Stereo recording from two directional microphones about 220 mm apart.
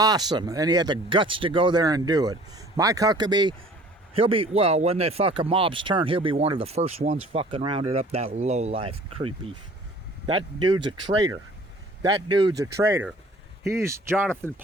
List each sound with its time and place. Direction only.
0.0 s speech: 15° right (ahead or behind)
10.2 s speech: 20° right (ahead or behind)